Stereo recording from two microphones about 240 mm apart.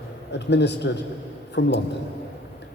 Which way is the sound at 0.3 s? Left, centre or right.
Left.